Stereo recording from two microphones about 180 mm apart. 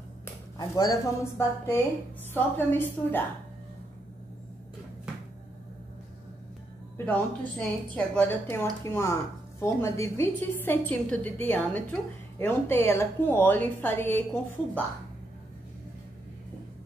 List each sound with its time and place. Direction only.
0.2 s a woman's voice: 20° left (ahead or behind)
7.1 s a woman's voice: 10° left (ahead or behind)